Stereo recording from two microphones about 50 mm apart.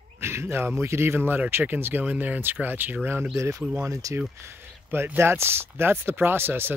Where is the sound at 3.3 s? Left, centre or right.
Right.